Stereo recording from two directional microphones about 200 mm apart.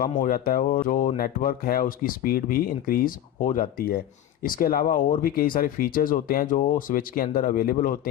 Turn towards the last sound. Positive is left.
turn(degrees=45)  # may be behind; listen again after turning